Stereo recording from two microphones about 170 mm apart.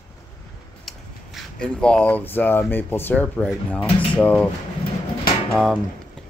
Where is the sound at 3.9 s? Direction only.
30° left (ahead or behind).